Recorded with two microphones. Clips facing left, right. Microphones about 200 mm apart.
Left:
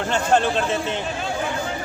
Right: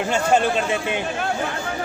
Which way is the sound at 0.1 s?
10° right (ahead or behind).